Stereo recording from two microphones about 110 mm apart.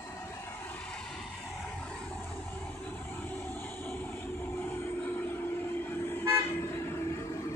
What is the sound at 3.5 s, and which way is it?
Vehicle, 15° left (ahead or behind).